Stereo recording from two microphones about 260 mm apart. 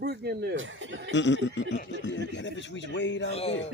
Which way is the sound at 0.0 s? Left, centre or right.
Right.